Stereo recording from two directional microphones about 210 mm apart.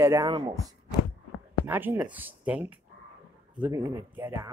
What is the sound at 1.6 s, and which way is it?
Speech, 10° right (ahead or behind).